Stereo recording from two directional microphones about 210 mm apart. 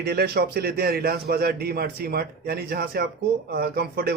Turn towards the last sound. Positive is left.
turn(degrees=-50)  # may be behind; listen again after turning